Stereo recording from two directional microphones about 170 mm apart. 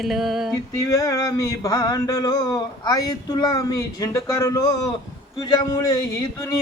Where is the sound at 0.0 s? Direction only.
Centre (ahead or behind).